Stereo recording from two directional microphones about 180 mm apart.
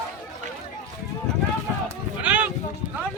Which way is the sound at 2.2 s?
10° right (ahead or behind).